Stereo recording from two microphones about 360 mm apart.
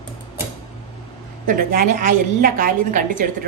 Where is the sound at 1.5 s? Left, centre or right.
Right.